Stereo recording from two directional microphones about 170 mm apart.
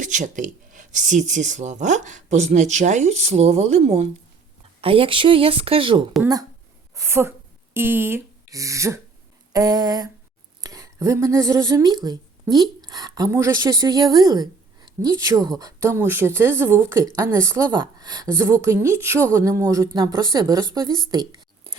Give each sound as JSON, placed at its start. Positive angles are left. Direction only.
{"t": 0.0, "sound": "speech", "side_deg": -50}
{"t": 6.9, "sound": "speech", "side_deg": -15}